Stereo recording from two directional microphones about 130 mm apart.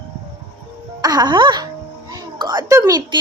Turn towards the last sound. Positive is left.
turn(degrees=-35)  # may be behind; listen again after turning